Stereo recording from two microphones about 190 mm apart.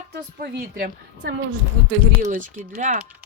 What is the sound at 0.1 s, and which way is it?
A woman's voice, 55° right (ahead or behind).